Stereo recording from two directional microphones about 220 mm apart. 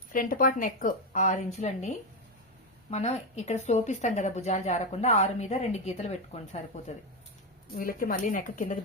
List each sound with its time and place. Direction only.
0.1 s speech: 40° left (ahead or behind)
2.9 s speech: 30° left (ahead or behind)
7.8 s speech: 40° left (ahead or behind)